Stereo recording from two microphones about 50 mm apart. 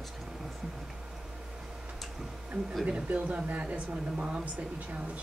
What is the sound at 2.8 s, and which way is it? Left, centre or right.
Speech, right.